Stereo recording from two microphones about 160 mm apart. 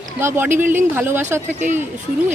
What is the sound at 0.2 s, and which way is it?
Speech, 15° right (ahead or behind).